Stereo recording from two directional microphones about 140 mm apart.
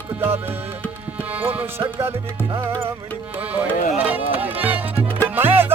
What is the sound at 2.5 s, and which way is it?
Music, 20° right (ahead or behind).